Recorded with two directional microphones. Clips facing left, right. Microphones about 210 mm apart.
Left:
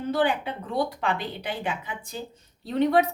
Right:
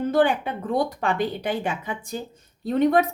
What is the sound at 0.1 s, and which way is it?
Speech, 50° right (ahead or behind).